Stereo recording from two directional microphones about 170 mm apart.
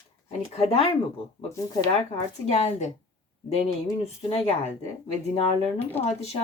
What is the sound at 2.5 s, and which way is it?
Speech, 40° left (ahead or behind).